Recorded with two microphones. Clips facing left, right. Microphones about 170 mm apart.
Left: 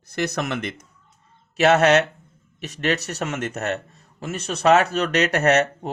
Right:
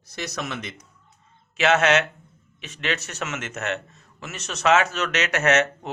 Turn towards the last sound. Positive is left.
turn(degrees=35)  # may be behind; listen again after turning